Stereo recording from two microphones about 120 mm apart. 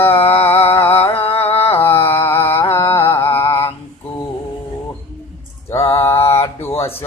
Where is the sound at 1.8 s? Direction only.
20° left (ahead or behind).